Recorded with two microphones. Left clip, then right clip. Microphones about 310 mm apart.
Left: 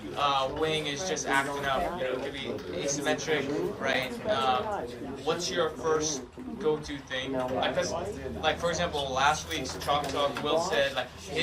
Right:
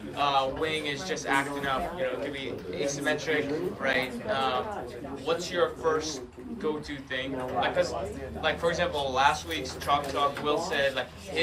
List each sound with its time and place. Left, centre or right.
0.2 s a man's voice: centre
2.8 s speech: centre
4.4 s a man's voice: centre
7.1 s a man's voice: centre